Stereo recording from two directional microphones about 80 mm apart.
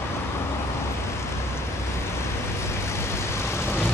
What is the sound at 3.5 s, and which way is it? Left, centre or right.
Vehicle, left.